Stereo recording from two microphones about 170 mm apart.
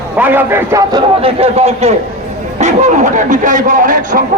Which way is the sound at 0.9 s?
30° right (ahead or behind).